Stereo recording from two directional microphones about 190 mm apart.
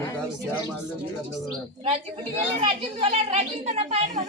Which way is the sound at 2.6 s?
30° right (ahead or behind).